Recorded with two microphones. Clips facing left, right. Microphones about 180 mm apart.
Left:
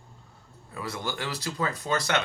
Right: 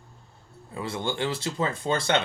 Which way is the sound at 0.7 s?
25° right (ahead or behind).